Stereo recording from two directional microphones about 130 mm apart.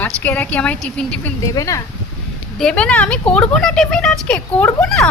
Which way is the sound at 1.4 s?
25° left (ahead or behind).